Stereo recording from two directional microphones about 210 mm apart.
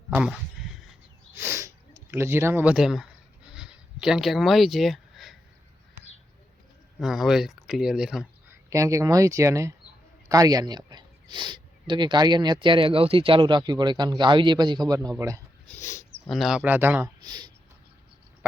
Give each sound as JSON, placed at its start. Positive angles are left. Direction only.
{"t": 0.1, "sound": "a sound", "side_deg": -5}
{"t": 1.3, "sound": "sniff", "side_deg": -10}
{"t": 7.0, "sound": "speech", "side_deg": 0}
{"t": 8.7, "sound": "speech", "side_deg": -15}
{"t": 15.6, "sound": "dog", "side_deg": 10}
{"t": 16.3, "sound": "speech", "side_deg": 0}